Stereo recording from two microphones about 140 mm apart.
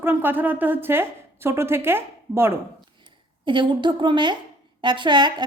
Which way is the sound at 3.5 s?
35° right (ahead or behind).